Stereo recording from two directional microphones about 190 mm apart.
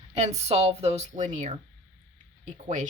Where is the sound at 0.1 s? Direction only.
35° right (ahead or behind).